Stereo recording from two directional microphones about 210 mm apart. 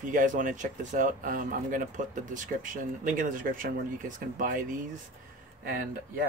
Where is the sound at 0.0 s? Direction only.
40° right (ahead or behind).